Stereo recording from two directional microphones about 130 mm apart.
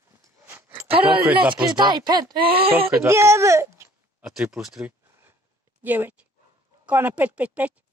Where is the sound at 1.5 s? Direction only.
35° right (ahead or behind).